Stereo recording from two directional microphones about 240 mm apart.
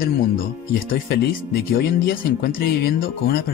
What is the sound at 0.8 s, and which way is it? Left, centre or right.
Speech, left.